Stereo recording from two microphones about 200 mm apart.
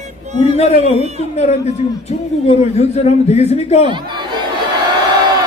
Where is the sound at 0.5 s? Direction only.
30° left (ahead or behind).